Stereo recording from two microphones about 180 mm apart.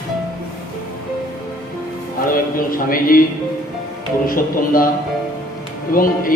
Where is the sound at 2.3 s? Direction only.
50° left (ahead or behind).